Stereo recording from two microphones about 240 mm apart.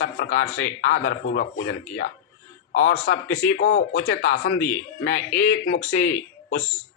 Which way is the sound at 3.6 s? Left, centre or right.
Left.